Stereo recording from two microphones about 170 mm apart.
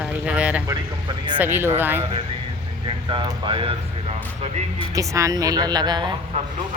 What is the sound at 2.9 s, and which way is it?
Speech, 30° right (ahead or behind).